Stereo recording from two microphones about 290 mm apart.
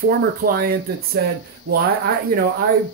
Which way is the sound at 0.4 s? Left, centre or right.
Right.